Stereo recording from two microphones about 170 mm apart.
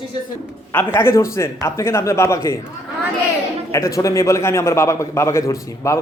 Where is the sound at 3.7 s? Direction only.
20° left (ahead or behind).